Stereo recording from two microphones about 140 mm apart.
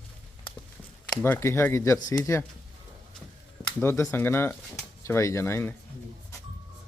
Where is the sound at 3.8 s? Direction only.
20° left (ahead or behind).